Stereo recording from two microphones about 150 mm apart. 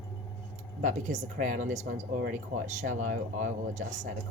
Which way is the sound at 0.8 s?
55° right (ahead or behind).